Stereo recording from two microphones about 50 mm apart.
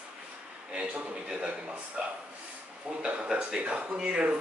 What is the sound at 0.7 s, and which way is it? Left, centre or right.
A man's voice, right.